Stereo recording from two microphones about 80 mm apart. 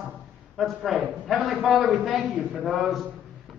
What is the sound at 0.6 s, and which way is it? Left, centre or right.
A man's voice, centre.